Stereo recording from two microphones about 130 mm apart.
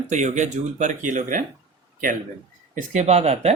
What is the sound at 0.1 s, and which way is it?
Speech, 65° right (ahead or behind).